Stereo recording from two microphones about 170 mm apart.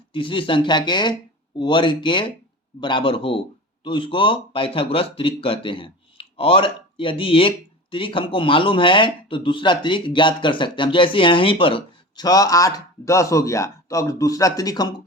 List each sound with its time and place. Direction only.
0.1 s speech: 30° left (ahead or behind)